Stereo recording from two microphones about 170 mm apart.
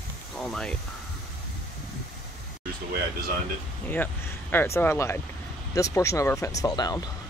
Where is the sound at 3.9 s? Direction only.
10° left (ahead or behind).